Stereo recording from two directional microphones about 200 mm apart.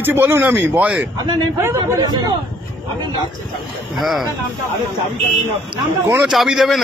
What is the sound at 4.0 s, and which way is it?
Speech, centre (ahead or behind).